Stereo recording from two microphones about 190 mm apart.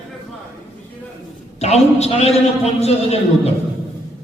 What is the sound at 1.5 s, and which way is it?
A woman's voice, 35° left (ahead or behind).